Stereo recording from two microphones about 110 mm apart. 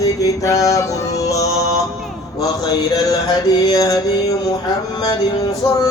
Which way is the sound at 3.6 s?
35° left (ahead or behind).